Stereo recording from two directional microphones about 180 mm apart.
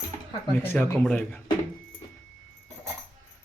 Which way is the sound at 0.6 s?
10° left (ahead or behind).